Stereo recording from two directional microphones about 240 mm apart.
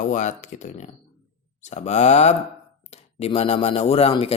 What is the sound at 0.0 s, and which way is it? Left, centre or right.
Speech, left.